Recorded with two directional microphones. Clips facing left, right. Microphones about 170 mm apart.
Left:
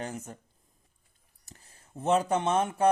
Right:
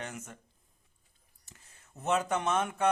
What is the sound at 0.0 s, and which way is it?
Speech, 35° left (ahead or behind).